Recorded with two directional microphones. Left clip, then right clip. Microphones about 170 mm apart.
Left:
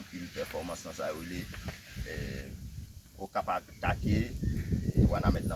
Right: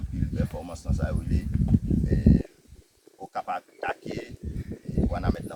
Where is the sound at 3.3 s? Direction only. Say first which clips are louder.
Right 1 dB; 30° right (ahead or behind).